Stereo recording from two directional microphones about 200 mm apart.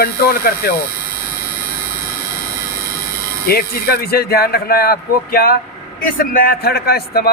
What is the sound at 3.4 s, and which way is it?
A man's voice, 50° left (ahead or behind).